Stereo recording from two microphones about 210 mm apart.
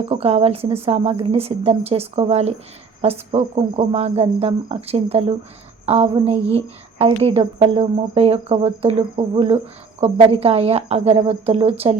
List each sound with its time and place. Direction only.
0.0 s speech: 30° right (ahead or behind)